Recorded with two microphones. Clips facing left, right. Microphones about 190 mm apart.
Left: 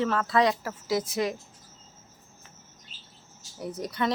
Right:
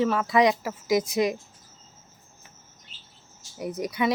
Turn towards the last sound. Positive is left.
turn(degrees=-10)  # may be behind; listen again after turning